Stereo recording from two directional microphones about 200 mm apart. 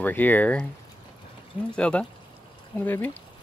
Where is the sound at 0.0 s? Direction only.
10° left (ahead or behind).